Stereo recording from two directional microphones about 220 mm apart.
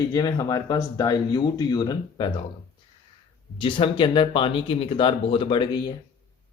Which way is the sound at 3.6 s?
25° left (ahead or behind).